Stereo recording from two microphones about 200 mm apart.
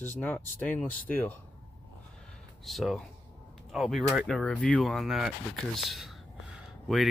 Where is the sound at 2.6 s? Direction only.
Centre (ahead or behind).